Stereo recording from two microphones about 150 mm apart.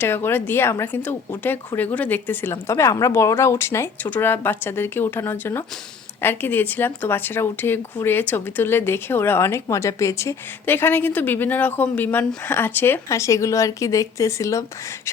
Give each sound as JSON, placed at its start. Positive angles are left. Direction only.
{"t": 0.0, "sound": "speech", "side_deg": 15}